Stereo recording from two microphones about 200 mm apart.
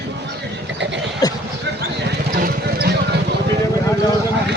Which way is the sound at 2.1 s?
50° right (ahead or behind).